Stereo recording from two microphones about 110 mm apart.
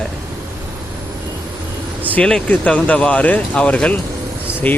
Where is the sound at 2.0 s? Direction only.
10° left (ahead or behind).